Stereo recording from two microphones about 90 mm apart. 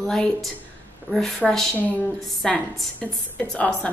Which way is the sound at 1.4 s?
5° left (ahead or behind).